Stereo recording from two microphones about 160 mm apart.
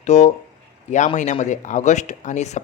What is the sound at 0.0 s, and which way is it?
Speech, 45° left (ahead or behind).